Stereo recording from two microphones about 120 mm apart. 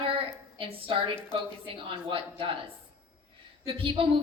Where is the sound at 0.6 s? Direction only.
50° right (ahead or behind).